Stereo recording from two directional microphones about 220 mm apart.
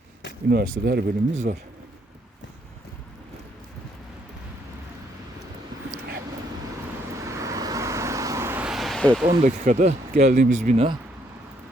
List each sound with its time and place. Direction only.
0.5 s speech: 45° right (ahead or behind)
7.2 s vehicle: 15° right (ahead or behind); by 9.2 s centre (ahead or behind)
9.4 s speech: 35° right (ahead or behind)